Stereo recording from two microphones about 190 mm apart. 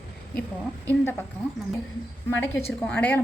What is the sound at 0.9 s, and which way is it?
Speech, 10° left (ahead or behind).